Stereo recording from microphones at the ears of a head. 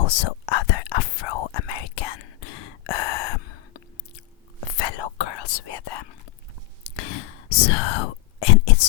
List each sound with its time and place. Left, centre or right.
0.0 s whispering: left